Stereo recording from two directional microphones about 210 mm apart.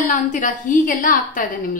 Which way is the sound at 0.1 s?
35° left (ahead or behind).